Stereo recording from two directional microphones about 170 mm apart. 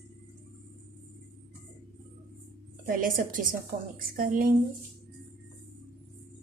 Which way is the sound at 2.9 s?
55° right (ahead or behind).